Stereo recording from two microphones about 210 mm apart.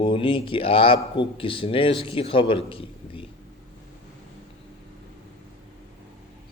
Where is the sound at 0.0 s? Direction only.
25° left (ahead or behind).